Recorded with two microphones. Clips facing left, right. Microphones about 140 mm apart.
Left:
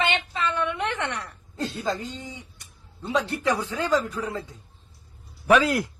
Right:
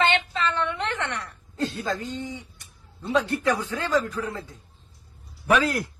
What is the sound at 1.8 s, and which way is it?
Speech, 15° left (ahead or behind).